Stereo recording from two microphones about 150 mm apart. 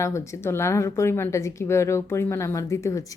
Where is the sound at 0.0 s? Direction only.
20° left (ahead or behind).